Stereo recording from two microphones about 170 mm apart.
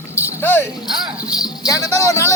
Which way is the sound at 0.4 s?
10° left (ahead or behind).